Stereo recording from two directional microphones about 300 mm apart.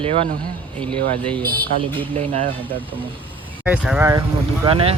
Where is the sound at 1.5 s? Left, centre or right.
Centre.